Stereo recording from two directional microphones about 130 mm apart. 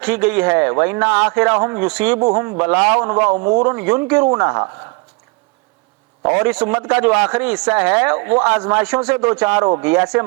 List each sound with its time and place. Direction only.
0.0 s speech: 10° right (ahead or behind)
2.1 s a man's voice: 25° right (ahead or behind)
2.6 s a man's voice: 10° right (ahead or behind)
6.2 s speech: 10° right (ahead or behind)